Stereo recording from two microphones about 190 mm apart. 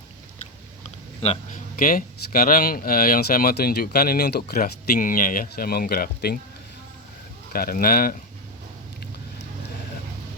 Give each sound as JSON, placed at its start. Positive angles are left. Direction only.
{"t": 1.7, "sound": "speech", "side_deg": 45}
{"t": 7.5, "sound": "speech", "side_deg": 50}